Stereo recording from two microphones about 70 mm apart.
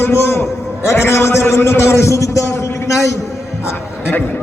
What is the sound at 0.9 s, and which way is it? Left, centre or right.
A man's voice, left.